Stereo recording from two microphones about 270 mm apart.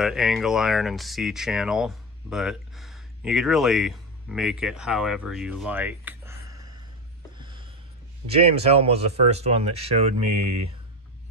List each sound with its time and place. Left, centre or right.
0.0 s speech: centre
6.4 s gasp: centre
7.3 s a sound: centre
8.3 s speech: right